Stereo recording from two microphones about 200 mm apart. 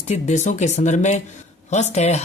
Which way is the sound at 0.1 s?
35° left (ahead or behind).